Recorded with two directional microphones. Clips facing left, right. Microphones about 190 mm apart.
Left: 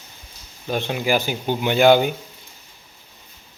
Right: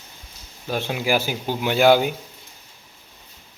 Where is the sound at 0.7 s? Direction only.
5° right (ahead or behind).